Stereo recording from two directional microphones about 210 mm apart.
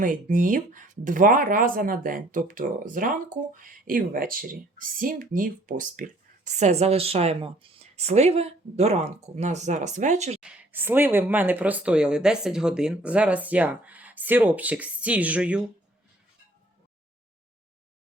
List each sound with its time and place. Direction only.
0.0 s speech: 40° right (ahead or behind)
10.4 s speech: 5° right (ahead or behind)